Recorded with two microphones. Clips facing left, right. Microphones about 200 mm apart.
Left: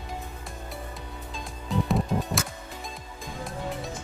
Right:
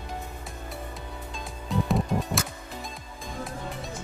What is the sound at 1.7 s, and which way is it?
Music, centre (ahead or behind).